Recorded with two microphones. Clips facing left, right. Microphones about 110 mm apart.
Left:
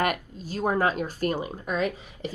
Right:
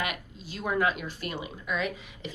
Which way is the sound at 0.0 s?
45° left (ahead or behind).